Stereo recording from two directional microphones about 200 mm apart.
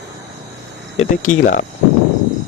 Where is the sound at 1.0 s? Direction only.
40° left (ahead or behind).